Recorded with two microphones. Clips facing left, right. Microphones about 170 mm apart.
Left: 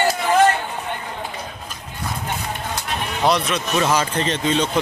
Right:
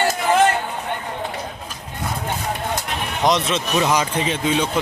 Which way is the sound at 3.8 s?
10° right (ahead or behind).